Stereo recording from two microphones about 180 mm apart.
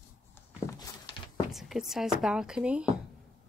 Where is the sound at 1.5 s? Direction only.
Centre (ahead or behind).